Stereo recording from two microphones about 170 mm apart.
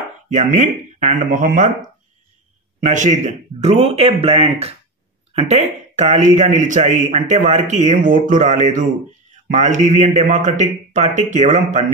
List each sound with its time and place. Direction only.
0.3 s speech: 45° right (ahead or behind)
2.8 s speech: 45° right (ahead or behind)